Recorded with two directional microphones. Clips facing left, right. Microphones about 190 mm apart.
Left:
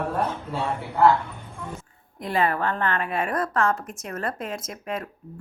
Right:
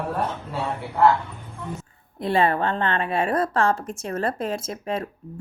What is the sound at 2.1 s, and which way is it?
A woman's voice, 30° right (ahead or behind).